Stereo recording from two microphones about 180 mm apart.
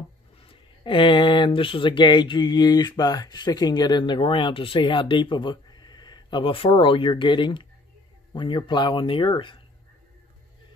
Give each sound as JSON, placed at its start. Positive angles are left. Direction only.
{"t": 0.5, "sound": "speech", "side_deg": 30}